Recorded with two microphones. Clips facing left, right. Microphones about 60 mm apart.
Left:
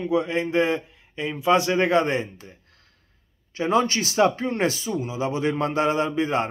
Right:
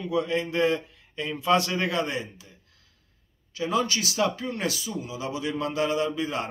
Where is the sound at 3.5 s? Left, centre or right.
Left.